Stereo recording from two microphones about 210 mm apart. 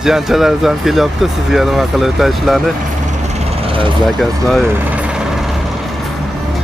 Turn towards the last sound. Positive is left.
turn(degrees=-5)  # may be behind; listen again after turning